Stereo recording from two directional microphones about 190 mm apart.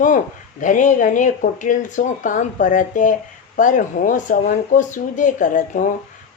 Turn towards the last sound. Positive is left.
turn(degrees=45)  # may be behind; listen again after turning